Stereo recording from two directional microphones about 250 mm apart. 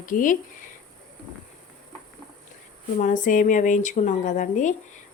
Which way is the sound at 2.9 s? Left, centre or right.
Left.